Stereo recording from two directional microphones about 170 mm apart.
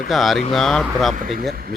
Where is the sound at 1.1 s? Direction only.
55° right (ahead or behind).